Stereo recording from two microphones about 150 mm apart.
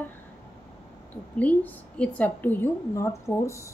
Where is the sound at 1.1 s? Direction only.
10° left (ahead or behind).